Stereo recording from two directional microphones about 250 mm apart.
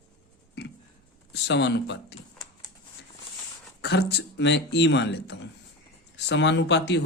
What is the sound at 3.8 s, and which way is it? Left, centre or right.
Speech, left.